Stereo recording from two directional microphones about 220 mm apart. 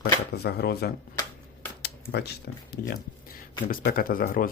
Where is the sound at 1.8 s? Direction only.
50° left (ahead or behind).